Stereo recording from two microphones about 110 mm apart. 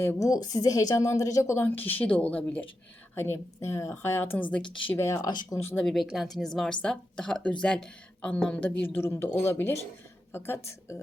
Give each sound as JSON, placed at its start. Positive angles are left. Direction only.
{"t": 0.2, "sound": "a woman's voice", "side_deg": 35}
{"t": 4.9, "sound": "a woman's voice", "side_deg": 25}
{"t": 5.2, "sound": "speech", "side_deg": 40}
{"t": 5.8, "sound": "a woman's voice", "side_deg": 0}